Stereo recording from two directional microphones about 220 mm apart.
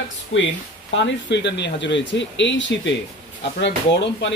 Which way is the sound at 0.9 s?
55° left (ahead or behind).